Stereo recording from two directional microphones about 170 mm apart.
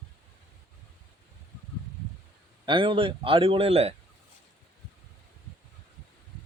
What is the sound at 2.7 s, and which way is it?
A man's voice, 30° right (ahead or behind).